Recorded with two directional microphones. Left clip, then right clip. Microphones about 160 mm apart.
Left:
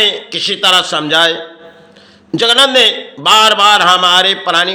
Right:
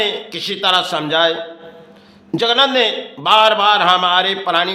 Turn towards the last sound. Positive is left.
turn(degrees=10)  # may be behind; listen again after turning